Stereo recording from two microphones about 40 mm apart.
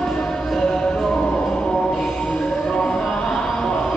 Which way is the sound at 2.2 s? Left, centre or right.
Left.